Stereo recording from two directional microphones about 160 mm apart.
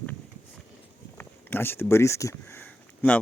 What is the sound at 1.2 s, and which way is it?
Speech, 15° left (ahead or behind).